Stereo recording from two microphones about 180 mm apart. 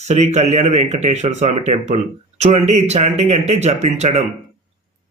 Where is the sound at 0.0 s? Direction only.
40° right (ahead or behind).